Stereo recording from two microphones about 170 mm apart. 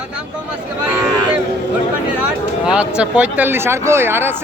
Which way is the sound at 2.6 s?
5° right (ahead or behind).